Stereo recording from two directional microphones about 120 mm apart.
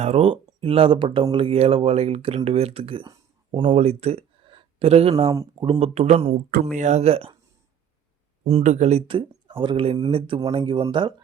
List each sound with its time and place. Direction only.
0.0 s speech: 60° right (ahead or behind)
3.8 s a sound: 60° right (ahead or behind)
5.5 s speech: 40° right (ahead or behind)
5.8 s speech: 60° right (ahead or behind)
6.7 s speech: 70° right (ahead or behind); by 7.3 s 55° right (ahead or behind)
8.4 s speech: 70° right (ahead or behind); by 11.1 s 40° right (ahead or behind)